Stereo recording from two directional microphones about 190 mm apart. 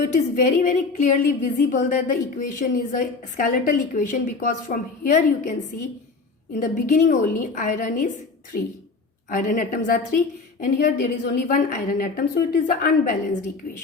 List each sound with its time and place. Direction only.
0.0 s a woman's voice: 45° left (ahead or behind)